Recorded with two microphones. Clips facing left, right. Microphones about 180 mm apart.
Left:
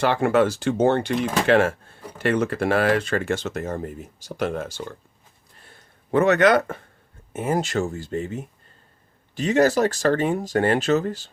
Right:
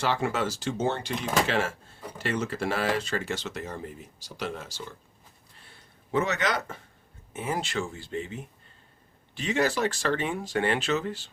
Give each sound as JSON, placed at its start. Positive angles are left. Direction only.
{"t": 0.0, "sound": "speech", "side_deg": 55}
{"t": 7.3, "sound": "speech", "side_deg": 45}